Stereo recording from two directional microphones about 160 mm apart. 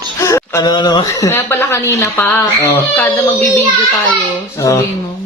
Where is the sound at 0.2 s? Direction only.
20° left (ahead or behind).